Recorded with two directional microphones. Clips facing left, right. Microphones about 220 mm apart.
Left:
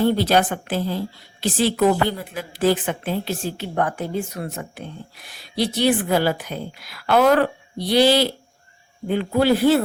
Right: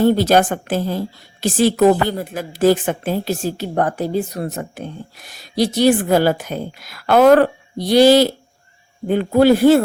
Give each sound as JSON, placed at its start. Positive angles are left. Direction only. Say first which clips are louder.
{"t": 0.0, "sound": "a woman's voice", "louder": "right 4 dB", "side_deg": -45}